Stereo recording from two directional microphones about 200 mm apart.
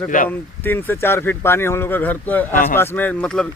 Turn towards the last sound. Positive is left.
turn(degrees=5)  # may be behind; listen again after turning